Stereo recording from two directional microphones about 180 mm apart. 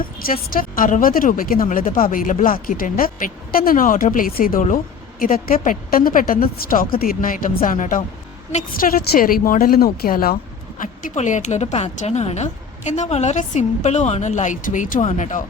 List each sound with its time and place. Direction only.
0.3 s a woman's voice: 50° left (ahead or behind)
10.8 s speech: 45° left (ahead or behind)